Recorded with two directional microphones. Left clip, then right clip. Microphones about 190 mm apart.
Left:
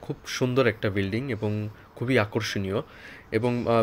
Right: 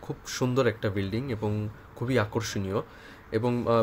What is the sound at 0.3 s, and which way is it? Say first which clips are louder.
A man's voice: left 3 dB; centre (ahead or behind).